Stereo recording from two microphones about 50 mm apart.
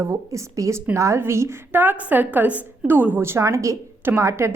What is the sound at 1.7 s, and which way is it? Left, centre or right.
A woman's voice, right.